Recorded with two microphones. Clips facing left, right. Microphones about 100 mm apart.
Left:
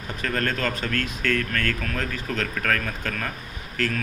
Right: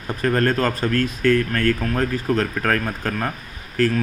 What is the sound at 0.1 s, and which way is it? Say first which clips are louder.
A man's voice: right 7 dB; 35° right (ahead or behind).